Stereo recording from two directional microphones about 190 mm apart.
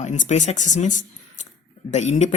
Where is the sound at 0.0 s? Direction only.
40° left (ahead or behind).